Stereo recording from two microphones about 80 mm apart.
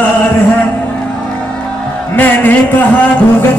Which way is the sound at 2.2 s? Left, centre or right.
Left.